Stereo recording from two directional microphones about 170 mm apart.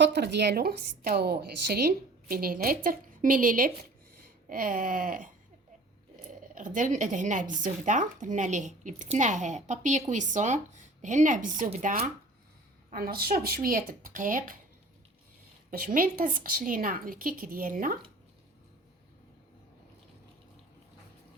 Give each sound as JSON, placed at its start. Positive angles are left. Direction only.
{"t": 0.0, "sound": "a woman's voice", "side_deg": -90}
{"t": 6.5, "sound": "speech", "side_deg": -50}
{"t": 12.9, "sound": "a woman's voice", "side_deg": -60}
{"t": 15.8, "sound": "a woman's voice", "side_deg": -55}